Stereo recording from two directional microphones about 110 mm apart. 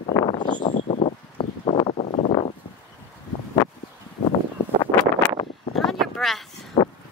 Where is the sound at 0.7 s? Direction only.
90° left; by 2.0 s 60° left (ahead or behind).